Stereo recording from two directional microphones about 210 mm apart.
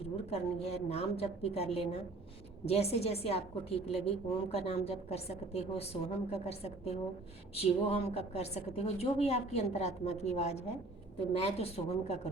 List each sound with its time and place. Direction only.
0.0 s a woman's voice: 30° left (ahead or behind)